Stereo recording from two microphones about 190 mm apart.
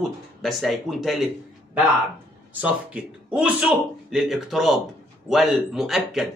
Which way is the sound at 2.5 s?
5° right (ahead or behind).